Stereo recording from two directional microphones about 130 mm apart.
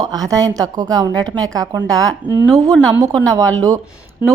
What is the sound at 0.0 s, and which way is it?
Speech, 30° right (ahead or behind).